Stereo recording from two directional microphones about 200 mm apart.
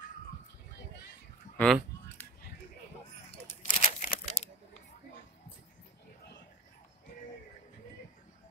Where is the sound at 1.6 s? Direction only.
5° left (ahead or behind).